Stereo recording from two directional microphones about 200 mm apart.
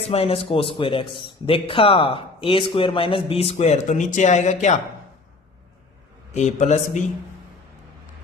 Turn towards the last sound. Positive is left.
turn(degrees=35)  # may be behind; listen again after turning